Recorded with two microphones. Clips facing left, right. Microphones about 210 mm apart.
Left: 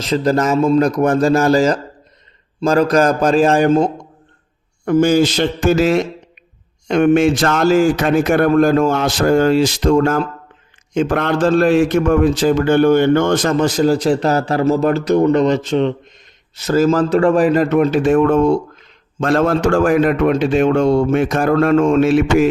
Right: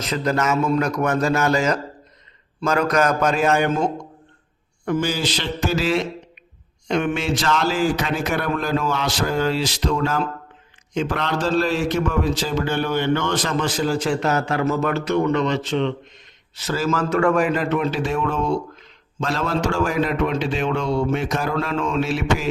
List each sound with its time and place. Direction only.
0.0 s a man's voice: 30° left (ahead or behind)
4.9 s a man's voice: 45° left (ahead or behind)